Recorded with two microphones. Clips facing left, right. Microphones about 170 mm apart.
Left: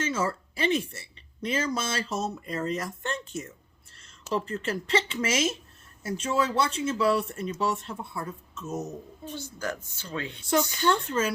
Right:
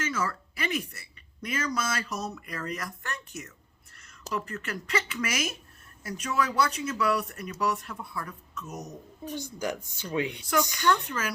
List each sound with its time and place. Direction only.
0.0 s speech: 25° left (ahead or behind)
9.3 s speech: 15° right (ahead or behind)